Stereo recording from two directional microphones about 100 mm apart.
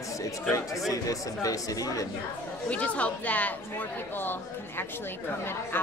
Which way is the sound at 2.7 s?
15° left (ahead or behind).